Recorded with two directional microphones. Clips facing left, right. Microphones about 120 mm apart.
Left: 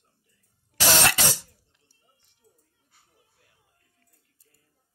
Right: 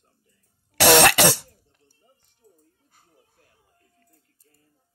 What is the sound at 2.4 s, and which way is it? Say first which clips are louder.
Music: right 6 dB; 20° right (ahead or behind).